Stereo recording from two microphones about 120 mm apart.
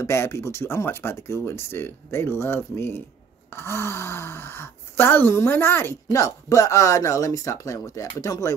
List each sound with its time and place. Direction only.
0.0 s speech: 20° left (ahead or behind)